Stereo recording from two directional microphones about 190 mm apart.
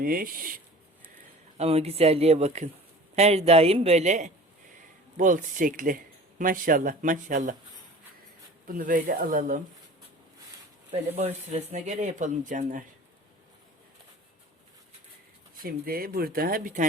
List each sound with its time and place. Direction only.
0.0 s speech: 50° right (ahead or behind)
1.5 s speech: 35° right (ahead or behind)
8.6 s speech: 45° right (ahead or behind)
11.2 s speech: 35° right (ahead or behind)
15.6 s speech: 50° right (ahead or behind)